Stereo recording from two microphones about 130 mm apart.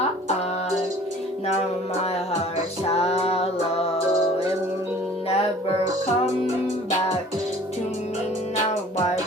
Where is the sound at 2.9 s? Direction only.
50° left (ahead or behind).